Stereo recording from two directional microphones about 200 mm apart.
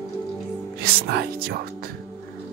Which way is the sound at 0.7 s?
50° right (ahead or behind).